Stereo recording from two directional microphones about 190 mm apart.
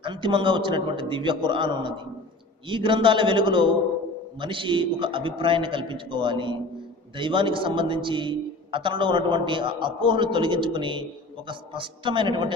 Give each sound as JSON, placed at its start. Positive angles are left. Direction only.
{"t": 0.0, "sound": "a man's voice", "side_deg": -25}